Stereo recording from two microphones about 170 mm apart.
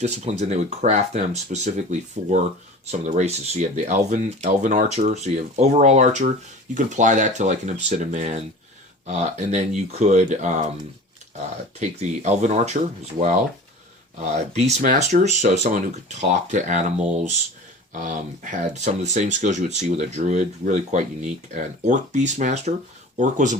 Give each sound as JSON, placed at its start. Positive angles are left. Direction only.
{"t": 0.0, "sound": "speech", "side_deg": -40}
{"t": 11.8, "sound": "speech", "side_deg": -45}